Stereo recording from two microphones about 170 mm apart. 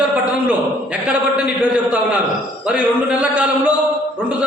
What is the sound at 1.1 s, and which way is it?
A man's voice, 5° right (ahead or behind).